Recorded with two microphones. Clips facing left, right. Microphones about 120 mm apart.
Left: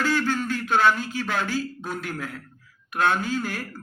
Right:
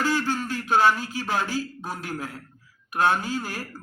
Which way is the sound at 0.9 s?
40° right (ahead or behind).